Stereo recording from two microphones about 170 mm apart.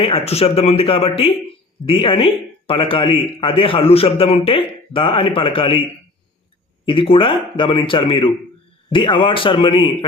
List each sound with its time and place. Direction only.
0.0 s speech: 35° left (ahead or behind)
6.8 s a man's voice: 30° left (ahead or behind)